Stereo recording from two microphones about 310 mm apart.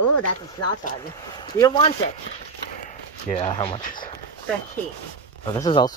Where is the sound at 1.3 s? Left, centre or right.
Centre.